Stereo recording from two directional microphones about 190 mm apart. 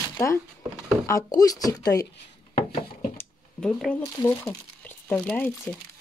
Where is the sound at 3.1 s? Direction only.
5° left (ahead or behind).